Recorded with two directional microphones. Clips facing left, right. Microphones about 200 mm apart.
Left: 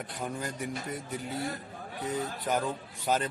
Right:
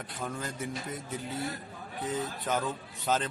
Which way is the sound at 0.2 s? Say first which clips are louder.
Left 1 dB; 15° left (ahead or behind).